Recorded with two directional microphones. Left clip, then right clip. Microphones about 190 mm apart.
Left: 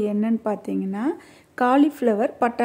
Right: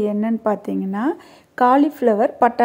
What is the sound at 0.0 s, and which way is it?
A woman's voice, centre (ahead or behind).